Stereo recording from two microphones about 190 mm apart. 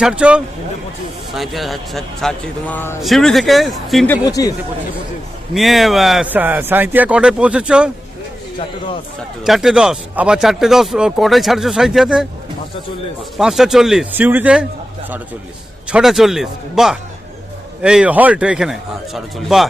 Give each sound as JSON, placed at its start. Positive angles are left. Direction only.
{"t": 0.0, "sound": "speech", "side_deg": -5}
{"t": 4.3, "sound": "speech", "side_deg": 20}
{"t": 5.5, "sound": "speech", "side_deg": 0}
{"t": 9.4, "sound": "speech", "side_deg": 0}
{"t": 13.3, "sound": "speech", "side_deg": 0}
{"t": 15.9, "sound": "speech", "side_deg": -5}